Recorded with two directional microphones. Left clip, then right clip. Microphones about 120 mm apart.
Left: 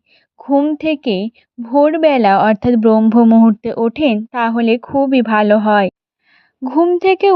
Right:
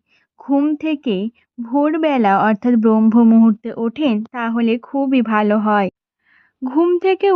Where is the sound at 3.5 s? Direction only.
55° left (ahead or behind); by 5.9 s 35° left (ahead or behind).